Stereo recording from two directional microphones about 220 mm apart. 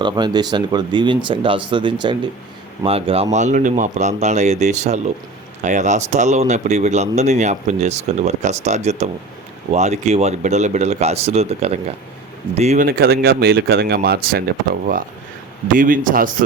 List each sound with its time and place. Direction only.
0.0 s speech: 20° right (ahead or behind); by 14.4 s 45° right (ahead or behind)
15.7 s speech: 40° right (ahead or behind)